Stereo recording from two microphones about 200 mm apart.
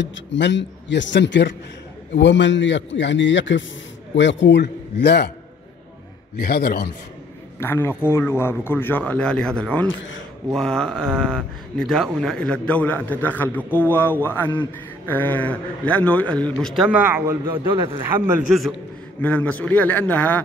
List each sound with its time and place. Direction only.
0.0 s a man's voice: 65° left (ahead or behind)
6.3 s a man's voice: 50° left (ahead or behind)
7.6 s a man's voice: 10° left (ahead or behind)
9.8 s a man's voice: 70° left (ahead or behind)
10.5 s a man's voice: centre (ahead or behind)
17.5 s a man's voice: 25° right (ahead or behind)
18.0 s speech: 10° right (ahead or behind)
19.2 s a man's voice: 5° left (ahead or behind)